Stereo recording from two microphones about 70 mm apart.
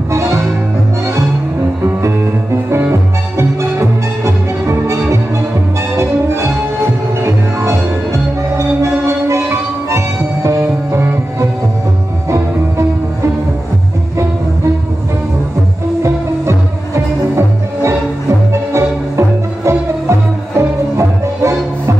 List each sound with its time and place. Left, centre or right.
0.1 s music: right
4.2 s music: right
8.5 s music: right
10.9 s music: right
16.0 s music: right
18.5 s music: right